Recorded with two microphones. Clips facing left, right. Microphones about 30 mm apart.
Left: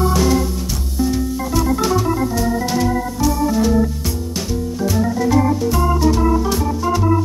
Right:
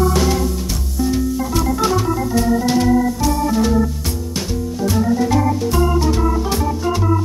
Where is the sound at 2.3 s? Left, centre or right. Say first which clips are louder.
Right 3 dB; centre.